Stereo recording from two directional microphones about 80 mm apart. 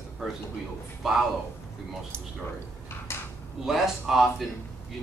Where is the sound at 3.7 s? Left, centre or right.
Centre.